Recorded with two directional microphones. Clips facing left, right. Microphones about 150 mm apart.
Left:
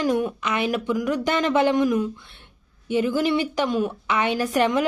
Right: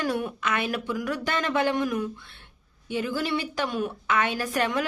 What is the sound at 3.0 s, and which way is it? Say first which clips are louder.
Speech: left 6 dB; 20° left (ahead or behind).